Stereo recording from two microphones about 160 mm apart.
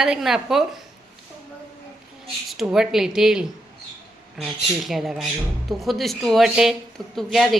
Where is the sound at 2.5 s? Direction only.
Centre (ahead or behind).